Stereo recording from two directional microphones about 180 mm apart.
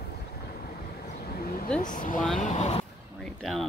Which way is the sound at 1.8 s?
45° left (ahead or behind).